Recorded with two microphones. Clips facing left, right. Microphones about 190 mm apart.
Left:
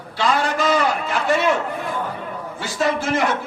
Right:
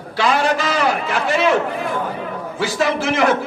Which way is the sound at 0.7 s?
90° right.